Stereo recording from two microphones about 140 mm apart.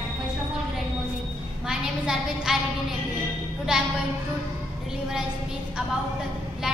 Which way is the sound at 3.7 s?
5° right (ahead or behind).